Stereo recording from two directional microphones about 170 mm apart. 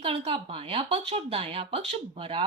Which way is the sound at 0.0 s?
35° right (ahead or behind).